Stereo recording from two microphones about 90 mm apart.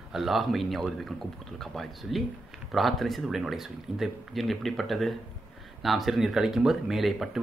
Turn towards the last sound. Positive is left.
turn(degrees=0)  # may be behind; listen again after turning